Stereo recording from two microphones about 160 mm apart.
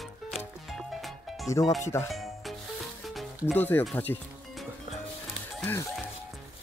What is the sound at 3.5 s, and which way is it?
Speech, 10° left (ahead or behind).